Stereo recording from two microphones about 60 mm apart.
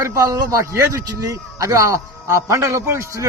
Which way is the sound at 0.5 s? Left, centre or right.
Right.